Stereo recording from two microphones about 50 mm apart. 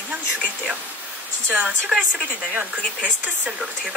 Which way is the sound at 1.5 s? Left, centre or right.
Centre.